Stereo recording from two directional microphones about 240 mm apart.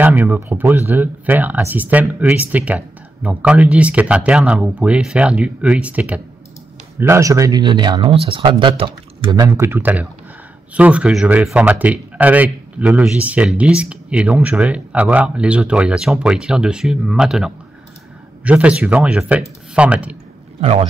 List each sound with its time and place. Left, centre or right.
0.0 s speech: centre